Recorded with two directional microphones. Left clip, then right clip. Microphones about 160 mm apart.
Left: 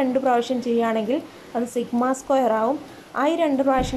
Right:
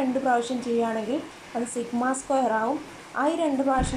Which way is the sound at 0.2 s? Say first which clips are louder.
Left 4 dB; 25° left (ahead or behind).